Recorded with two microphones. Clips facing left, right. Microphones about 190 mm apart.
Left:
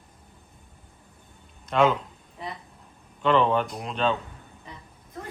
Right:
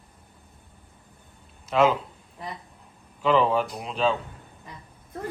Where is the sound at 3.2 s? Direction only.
5° right (ahead or behind).